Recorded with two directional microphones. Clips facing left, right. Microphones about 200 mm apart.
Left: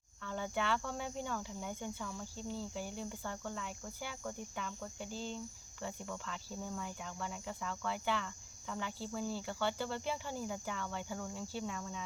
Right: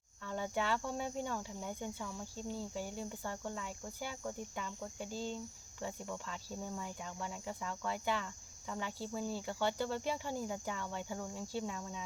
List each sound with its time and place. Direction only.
0.3 s cricket: 10° right (ahead or behind)